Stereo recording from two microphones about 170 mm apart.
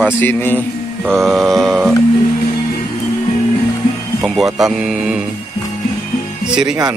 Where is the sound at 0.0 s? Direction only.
10° left (ahead or behind).